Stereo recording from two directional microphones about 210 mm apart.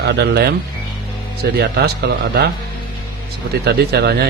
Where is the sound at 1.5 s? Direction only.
50° right (ahead or behind).